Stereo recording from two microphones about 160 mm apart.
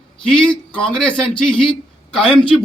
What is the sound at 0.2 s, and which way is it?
Speech, 5° left (ahead or behind).